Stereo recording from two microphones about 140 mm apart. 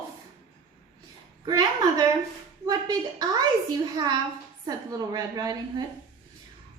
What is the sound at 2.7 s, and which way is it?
Speech, 25° right (ahead or behind).